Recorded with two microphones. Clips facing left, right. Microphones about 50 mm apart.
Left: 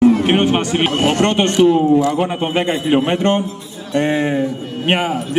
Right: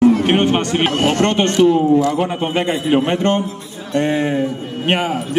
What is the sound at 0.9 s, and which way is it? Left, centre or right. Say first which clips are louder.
A man's voice: left 1 dB; centre.